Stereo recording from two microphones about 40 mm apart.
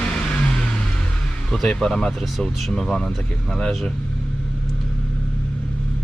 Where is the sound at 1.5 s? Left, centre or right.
Centre.